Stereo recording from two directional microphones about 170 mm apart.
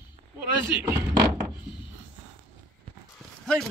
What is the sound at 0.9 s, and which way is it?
Speech, 15° right (ahead or behind).